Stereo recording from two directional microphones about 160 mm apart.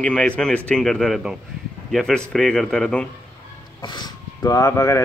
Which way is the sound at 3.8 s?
25° left (ahead or behind).